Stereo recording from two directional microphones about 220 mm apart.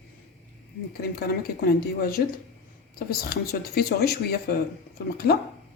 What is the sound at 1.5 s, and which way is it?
Speech, 45° left (ahead or behind).